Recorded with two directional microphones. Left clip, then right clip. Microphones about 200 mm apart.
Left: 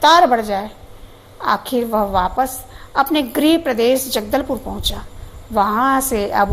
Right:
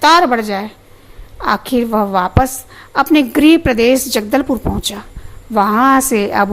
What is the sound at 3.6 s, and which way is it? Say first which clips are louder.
Speech: right 4 dB; 50° right (ahead or behind).